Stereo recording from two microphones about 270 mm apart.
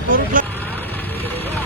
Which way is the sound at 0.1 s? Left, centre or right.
Right.